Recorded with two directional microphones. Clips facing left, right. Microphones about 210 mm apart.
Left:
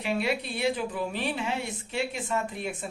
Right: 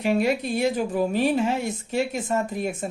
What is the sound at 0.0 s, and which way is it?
A woman's voice, 45° right (ahead or behind).